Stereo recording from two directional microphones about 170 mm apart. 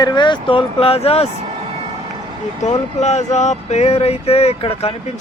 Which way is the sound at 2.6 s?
40° left (ahead or behind).